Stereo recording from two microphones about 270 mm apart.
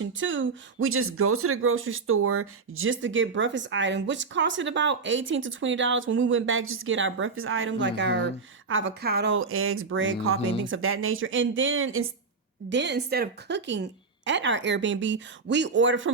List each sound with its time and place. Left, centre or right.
0.0 s speech: right